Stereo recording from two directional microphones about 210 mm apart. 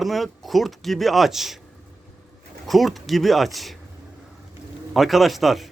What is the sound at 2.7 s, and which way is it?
Speech, centre (ahead or behind).